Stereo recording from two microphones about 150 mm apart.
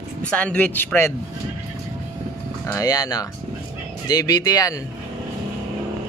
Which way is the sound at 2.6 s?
25° left (ahead or behind).